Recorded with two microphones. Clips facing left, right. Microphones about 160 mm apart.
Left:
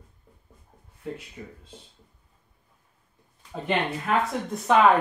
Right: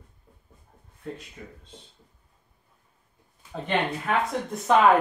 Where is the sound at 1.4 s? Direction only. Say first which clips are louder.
Left 2 dB; 10° left (ahead or behind).